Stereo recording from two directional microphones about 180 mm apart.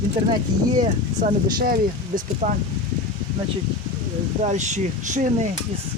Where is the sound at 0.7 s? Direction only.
45° right (ahead or behind).